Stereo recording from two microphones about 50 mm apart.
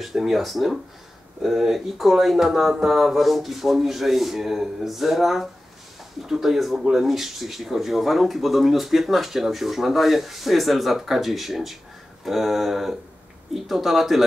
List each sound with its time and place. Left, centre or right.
0.0 s speech: centre